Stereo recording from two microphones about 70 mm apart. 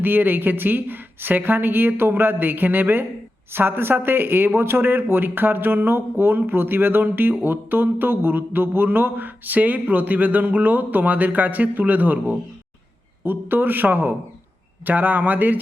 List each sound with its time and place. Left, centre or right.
0.0 s speech: right